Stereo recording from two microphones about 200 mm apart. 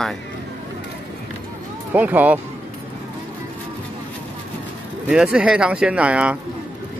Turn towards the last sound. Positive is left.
turn(degrees=-5)  # may be behind; listen again after turning